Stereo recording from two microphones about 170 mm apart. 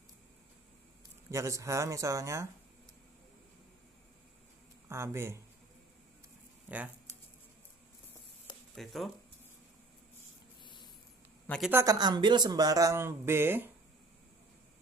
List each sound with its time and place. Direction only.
1.3 s speech: 20° right (ahead or behind)
4.8 s speech: 15° right (ahead or behind)
6.7 s speech: 10° right (ahead or behind)
8.7 s speech: centre (ahead or behind)
10.6 s spray: 30° left (ahead or behind)
11.4 s speech: 5° left (ahead or behind)
11.7 s speech: 20° right (ahead or behind)